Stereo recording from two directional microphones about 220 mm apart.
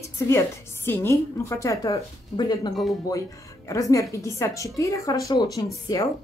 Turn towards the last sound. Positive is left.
turn(degrees=15)  # may be behind; listen again after turning